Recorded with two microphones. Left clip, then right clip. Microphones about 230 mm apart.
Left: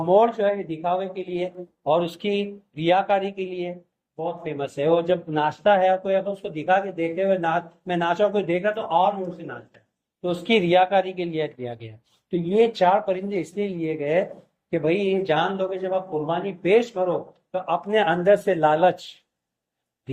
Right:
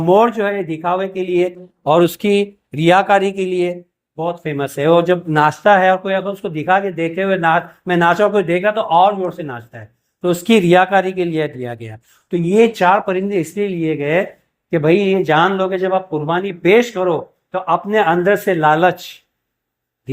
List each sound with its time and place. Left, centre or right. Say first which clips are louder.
0.1 s speech: right 5 dB; right